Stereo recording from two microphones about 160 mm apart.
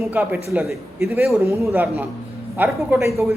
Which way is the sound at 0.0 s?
10° right (ahead or behind).